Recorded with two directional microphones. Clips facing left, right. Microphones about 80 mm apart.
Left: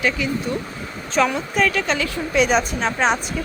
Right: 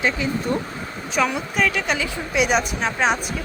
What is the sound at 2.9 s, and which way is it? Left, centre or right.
Speech, centre.